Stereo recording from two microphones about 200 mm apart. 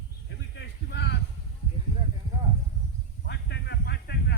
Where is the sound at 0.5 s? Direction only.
60° left (ahead or behind).